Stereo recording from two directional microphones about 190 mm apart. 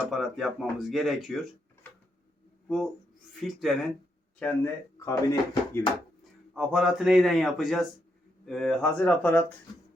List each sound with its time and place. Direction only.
0.0 s speech: centre (ahead or behind)
2.6 s speech: centre (ahead or behind); by 5.9 s 20° left (ahead or behind)
6.5 s speech: 5° right (ahead or behind)